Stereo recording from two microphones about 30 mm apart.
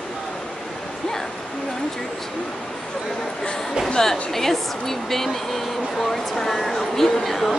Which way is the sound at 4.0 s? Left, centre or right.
Centre.